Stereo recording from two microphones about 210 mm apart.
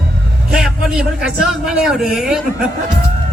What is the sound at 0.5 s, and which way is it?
A man's voice, 5° right (ahead or behind).